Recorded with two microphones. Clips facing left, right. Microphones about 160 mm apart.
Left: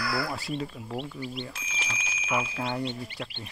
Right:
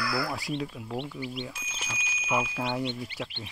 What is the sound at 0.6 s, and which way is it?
Speech, centre (ahead or behind).